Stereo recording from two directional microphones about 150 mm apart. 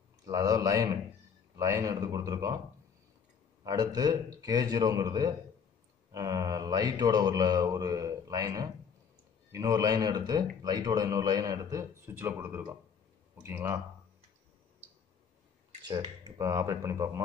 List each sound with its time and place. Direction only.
0.2 s a man's voice: 25° right (ahead or behind)
3.6 s a man's voice: 25° right (ahead or behind)
15.8 s a man's voice: 30° right (ahead or behind)